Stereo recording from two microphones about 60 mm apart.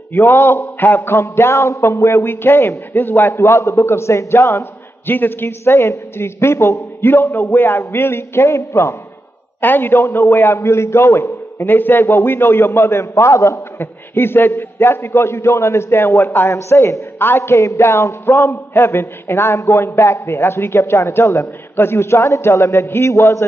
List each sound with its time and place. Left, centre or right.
0.1 s a man's voice: left
1.7 s a man's voice: left
5.7 s a man's voice: left
7.1 s a man's voice: left
9.6 s a man's voice: left
11.6 s a man's voice: left
13.7 s a man's voice: left